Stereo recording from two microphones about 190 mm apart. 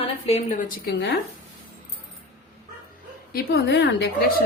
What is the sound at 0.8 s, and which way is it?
Speech, 60° left (ahead or behind).